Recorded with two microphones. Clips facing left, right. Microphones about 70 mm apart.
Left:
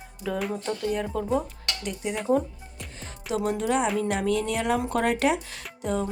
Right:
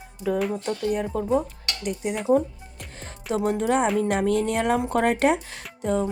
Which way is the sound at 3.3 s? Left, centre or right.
Right.